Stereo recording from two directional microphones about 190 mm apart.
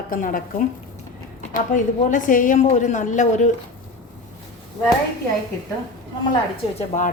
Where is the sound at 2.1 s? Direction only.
45° left (ahead or behind).